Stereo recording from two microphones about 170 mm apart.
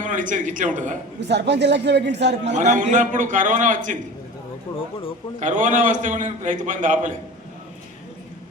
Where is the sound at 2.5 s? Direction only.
45° right (ahead or behind).